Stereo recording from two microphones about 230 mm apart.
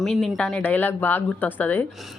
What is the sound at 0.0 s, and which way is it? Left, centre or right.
Speech, centre.